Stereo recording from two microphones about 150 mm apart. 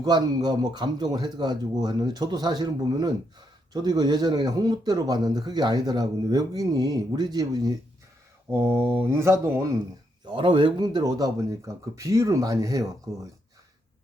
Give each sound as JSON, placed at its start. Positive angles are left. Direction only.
{"t": 0.0, "sound": "speech", "side_deg": -25}
{"t": 10.2, "sound": "speech", "side_deg": -30}